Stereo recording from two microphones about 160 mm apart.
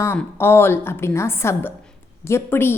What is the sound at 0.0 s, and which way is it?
Speech, 15° left (ahead or behind).